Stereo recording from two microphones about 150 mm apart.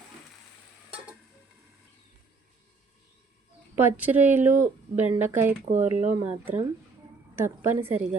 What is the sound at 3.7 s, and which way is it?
Speech, 15° right (ahead or behind).